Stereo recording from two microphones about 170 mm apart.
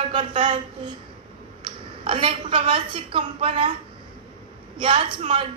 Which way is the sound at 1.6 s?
30° right (ahead or behind).